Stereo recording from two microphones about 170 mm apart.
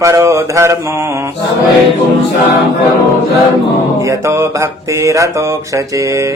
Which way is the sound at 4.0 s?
15° right (ahead or behind).